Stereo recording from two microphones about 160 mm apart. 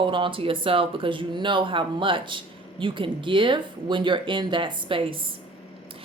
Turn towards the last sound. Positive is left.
turn(degrees=-30)  # may be behind; listen again after turning